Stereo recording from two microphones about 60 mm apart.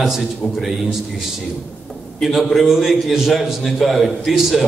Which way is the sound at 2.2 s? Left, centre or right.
Centre.